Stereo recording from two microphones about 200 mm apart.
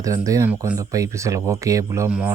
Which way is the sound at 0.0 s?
15° right (ahead or behind).